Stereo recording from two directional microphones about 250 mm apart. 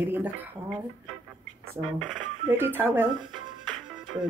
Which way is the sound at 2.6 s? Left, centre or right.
Centre.